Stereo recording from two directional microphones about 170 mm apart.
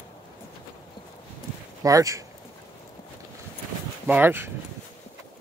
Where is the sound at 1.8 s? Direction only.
20° right (ahead or behind).